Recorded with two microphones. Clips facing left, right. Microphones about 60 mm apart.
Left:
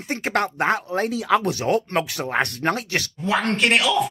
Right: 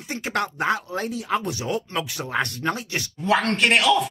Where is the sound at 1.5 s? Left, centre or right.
Left.